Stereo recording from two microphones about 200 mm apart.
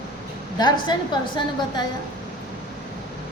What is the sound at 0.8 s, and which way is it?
A woman's voice, 25° left (ahead or behind).